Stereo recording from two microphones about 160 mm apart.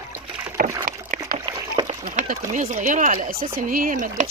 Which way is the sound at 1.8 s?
50° right (ahead or behind).